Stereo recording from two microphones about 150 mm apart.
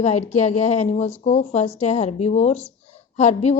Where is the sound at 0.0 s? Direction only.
45° left (ahead or behind).